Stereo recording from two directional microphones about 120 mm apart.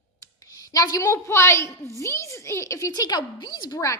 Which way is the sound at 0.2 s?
30° left (ahead or behind).